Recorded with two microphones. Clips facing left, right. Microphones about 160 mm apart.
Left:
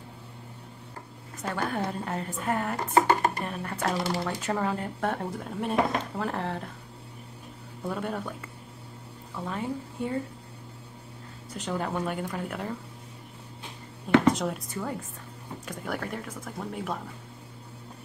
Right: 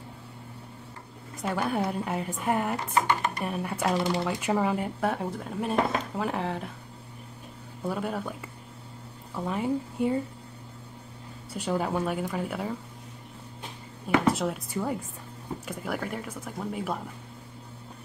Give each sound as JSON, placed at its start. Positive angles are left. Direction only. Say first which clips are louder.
{"t": 1.5, "sound": "a woman's voice", "louder": "right 2 dB", "side_deg": -10}
{"t": 2.9, "sound": "speech", "louder": "left 6 dB", "side_deg": 40}
{"t": 3.4, "sound": "a woman's voice", "louder": "right 2 dB", "side_deg": -10}
{"t": 7.8, "sound": "a woman's voice", "louder": "right 1 dB", "side_deg": -5}
{"t": 11.5, "sound": "a woman's voice", "louder": "right 3 dB", "side_deg": -10}
{"t": 14.1, "sound": "a sound", "louder": "left 2 dB", "side_deg": -5}
{"t": 14.7, "sound": "a woman's voice", "louder": "right 3 dB", "side_deg": -10}